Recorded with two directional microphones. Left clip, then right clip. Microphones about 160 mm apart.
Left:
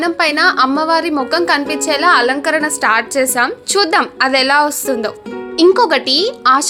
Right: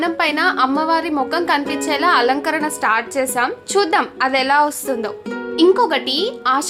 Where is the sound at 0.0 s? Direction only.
20° left (ahead or behind).